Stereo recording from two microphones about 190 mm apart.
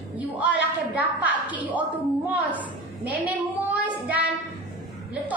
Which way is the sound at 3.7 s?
10° right (ahead or behind).